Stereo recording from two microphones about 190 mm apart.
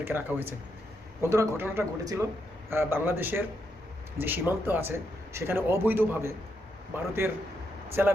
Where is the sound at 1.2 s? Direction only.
15° right (ahead or behind).